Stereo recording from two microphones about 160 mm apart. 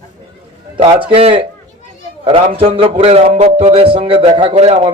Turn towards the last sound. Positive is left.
turn(degrees=-40)  # may be behind; listen again after turning